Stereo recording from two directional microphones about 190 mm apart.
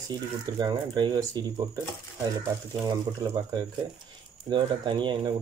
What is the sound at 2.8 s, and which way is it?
Speech, 20° right (ahead or behind).